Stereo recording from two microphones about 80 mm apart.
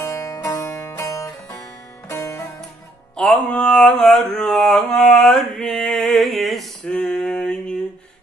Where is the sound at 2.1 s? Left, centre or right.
Left.